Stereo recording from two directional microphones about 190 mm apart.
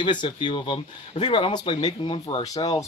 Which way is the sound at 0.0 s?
25° left (ahead or behind).